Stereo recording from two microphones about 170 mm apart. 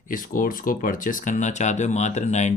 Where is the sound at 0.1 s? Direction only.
55° left (ahead or behind).